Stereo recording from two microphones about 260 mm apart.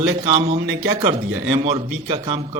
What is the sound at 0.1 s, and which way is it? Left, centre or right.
A man's voice, right.